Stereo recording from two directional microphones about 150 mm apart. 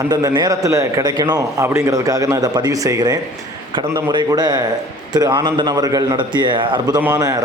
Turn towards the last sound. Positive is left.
turn(degrees=-25)  # may be behind; listen again after turning